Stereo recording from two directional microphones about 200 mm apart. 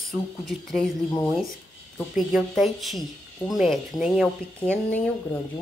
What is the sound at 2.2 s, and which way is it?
Speech, centre (ahead or behind).